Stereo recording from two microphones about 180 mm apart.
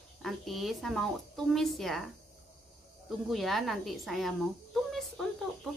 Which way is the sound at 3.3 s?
Centre (ahead or behind).